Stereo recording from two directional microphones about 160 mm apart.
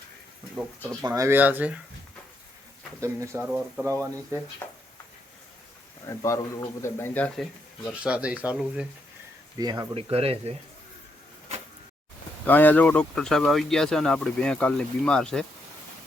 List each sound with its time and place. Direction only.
0.9 s speech: 20° right (ahead or behind)
3.0 s speech: 20° right (ahead or behind)
3.4 s speech: 5° right (ahead or behind)
6.1 s speech: 20° left (ahead or behind)
7.9 s speech: 5° right (ahead or behind)
9.6 s speech: 25° right (ahead or behind)
10.1 s speech: 40° right (ahead or behind)
12.5 s speech: 10° left (ahead or behind)